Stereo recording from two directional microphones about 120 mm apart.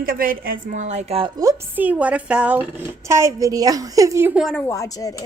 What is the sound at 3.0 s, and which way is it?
A woman's voice, 25° right (ahead or behind).